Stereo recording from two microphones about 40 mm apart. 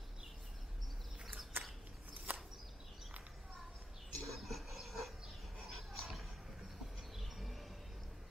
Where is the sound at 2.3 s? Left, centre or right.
Right.